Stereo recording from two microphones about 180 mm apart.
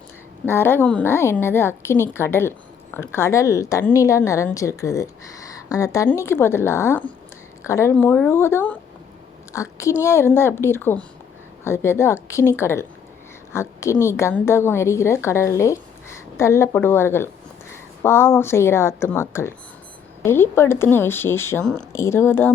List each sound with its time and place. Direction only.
0.4 s a woman's voice: 10° left (ahead or behind)
21.9 s speech: 15° left (ahead or behind)